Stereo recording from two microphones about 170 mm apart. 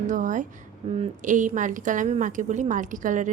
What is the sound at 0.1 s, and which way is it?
Speech, 50° right (ahead or behind).